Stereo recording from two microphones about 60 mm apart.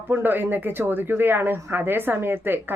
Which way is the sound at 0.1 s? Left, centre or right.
Right.